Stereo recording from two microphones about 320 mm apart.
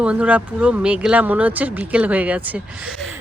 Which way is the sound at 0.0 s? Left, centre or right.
Centre.